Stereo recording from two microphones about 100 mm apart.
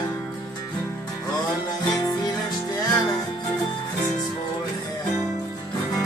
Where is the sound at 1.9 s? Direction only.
40° left (ahead or behind).